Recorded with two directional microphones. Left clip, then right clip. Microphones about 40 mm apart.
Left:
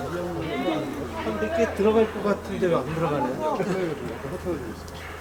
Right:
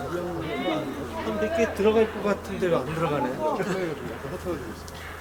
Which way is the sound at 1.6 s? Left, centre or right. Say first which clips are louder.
Left 1 dB; centre.